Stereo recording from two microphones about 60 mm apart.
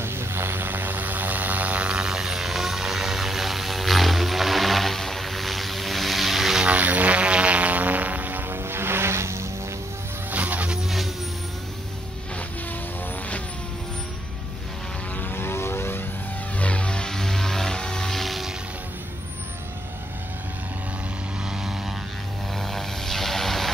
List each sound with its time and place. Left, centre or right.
0.0 s vehicle: right; by 6.6 s centre
6.6 s a sound: right
10.3 s music: right
15.1 s vehicle: left
16.5 s vehicle: left; by 18.5 s centre
22.6 s vehicle: centre